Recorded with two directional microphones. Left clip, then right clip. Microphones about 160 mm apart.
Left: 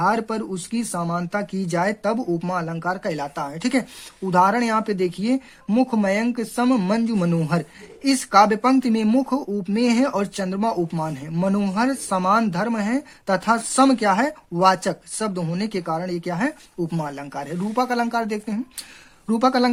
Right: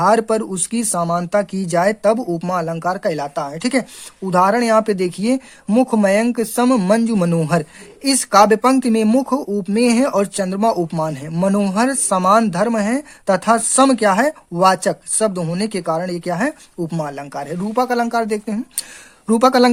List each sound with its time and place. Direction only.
0.0 s speech: 40° right (ahead or behind)